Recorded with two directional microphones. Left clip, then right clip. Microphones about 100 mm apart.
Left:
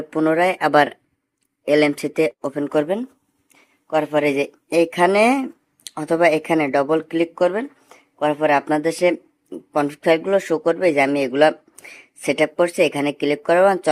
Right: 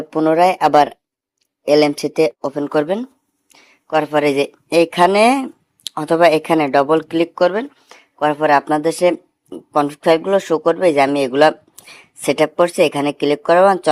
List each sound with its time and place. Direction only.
0.0 s speech: 15° right (ahead or behind)
3.5 s speech: 35° right (ahead or behind)